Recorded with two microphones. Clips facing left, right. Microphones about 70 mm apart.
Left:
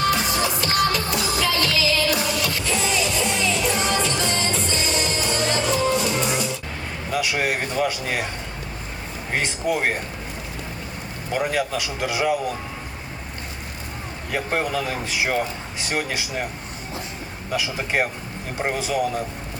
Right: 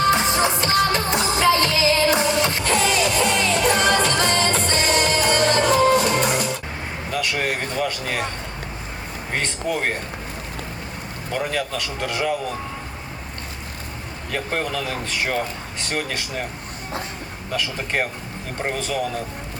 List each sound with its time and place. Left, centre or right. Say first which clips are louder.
0.0 s music: right 3 dB; right
2.6 s music: right 3 dB; right
7.1 s vehicle: left 1 dB; centre
9.3 s speech: left 1 dB; centre
11.3 s speech: left 2 dB; centre
14.3 s speech: left 1 dB; centre
17.5 s speech: left 1 dB; centre